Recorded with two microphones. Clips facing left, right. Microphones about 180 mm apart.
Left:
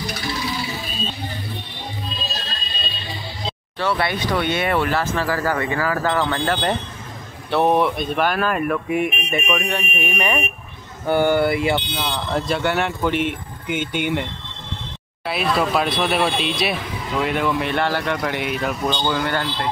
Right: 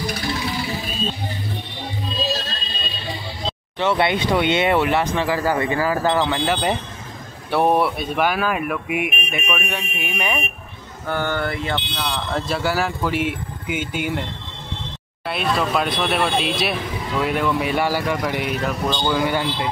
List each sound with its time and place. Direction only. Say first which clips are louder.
3.8 s speech: right 3 dB; 20° right (ahead or behind); by 10.4 s 5° right (ahead or behind)
11.1 s speech: left 6 dB; 15° left (ahead or behind); by 14.2 s 5° right (ahead or behind)
15.2 s speech: left 1 dB; 5° left (ahead or behind)